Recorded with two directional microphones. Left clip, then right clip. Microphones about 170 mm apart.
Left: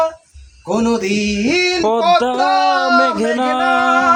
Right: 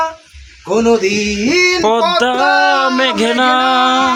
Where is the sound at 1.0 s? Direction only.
90° left.